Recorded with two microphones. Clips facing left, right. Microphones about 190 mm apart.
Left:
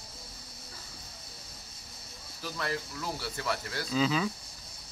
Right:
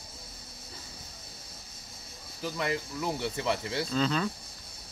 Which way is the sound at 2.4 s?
15° right (ahead or behind).